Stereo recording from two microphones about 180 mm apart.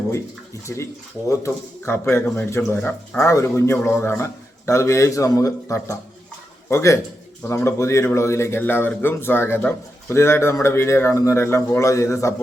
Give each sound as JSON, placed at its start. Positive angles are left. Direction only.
{"t": 0.7, "sound": "a man's voice", "side_deg": 10}